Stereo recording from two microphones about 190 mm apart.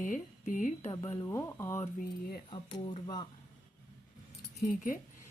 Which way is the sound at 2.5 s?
25° left (ahead or behind).